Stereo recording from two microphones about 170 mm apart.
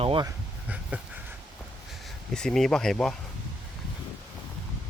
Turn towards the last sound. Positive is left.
turn(degrees=5)  # may be behind; listen again after turning